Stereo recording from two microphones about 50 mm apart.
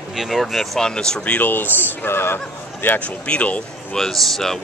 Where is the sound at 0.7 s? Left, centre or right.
Centre.